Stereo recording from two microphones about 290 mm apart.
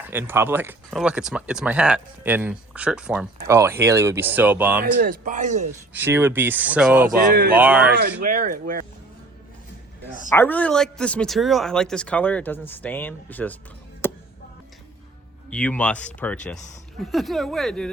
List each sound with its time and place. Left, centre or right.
0.1 s speech: centre
4.8 s speech: right
5.9 s speech: centre
7.1 s speech: right
7.5 s speech: centre
8.2 s speech: right
10.3 s speech: centre
14.0 s a sound: centre
15.4 s speech: centre